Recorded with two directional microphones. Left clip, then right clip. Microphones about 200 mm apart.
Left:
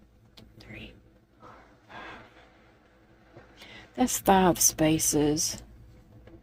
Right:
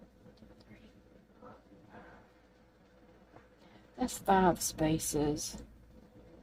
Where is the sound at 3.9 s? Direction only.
35° left (ahead or behind).